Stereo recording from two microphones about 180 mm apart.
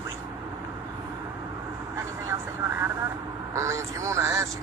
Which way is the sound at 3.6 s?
15° right (ahead or behind).